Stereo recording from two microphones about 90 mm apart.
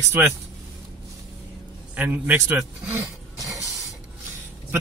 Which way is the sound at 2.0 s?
20° right (ahead or behind).